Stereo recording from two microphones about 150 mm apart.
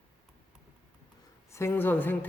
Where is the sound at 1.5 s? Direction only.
15° left (ahead or behind).